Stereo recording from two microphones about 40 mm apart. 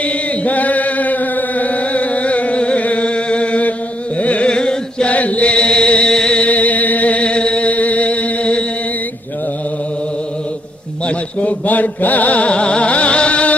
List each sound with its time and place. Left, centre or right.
0.0 s chant: left
4.2 s carnatic music: left
4.5 s chant: centre
5.0 s chant: left; by 6.4 s centre
6.4 s music: left
11.1 s speech: left